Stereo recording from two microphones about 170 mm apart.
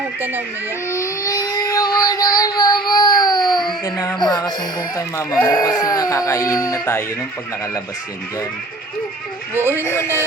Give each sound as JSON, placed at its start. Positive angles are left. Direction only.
{"t": 0.2, "sound": "speech", "side_deg": -10}
{"t": 0.9, "sound": "a sound", "side_deg": 20}
{"t": 3.7, "sound": "speech", "side_deg": 20}
{"t": 9.6, "sound": "speech", "side_deg": -15}
{"t": 9.9, "sound": "speech", "side_deg": 15}